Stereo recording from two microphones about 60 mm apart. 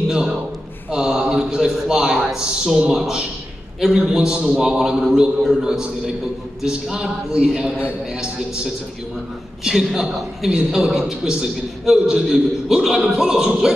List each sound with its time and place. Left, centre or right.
0.9 s a man's voice: centre
9.7 s a man's voice: centre